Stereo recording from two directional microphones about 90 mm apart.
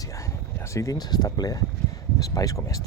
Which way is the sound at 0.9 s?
50° left (ahead or behind).